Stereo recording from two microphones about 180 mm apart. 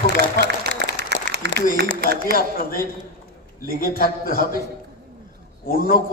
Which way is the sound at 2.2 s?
55° left (ahead or behind).